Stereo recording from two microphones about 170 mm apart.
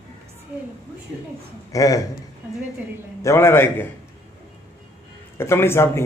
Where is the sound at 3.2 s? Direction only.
15° left (ahead or behind).